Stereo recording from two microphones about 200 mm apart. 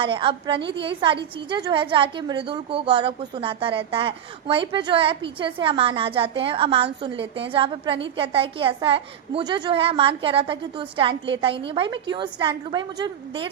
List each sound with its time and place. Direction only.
0.0 s a woman's voice: 25° right (ahead or behind)